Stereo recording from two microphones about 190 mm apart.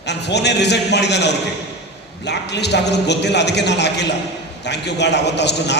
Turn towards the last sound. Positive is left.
turn(degrees=65)  # may be behind; listen again after turning